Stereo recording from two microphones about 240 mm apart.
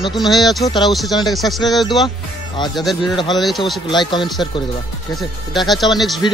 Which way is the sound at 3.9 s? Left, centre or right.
Centre.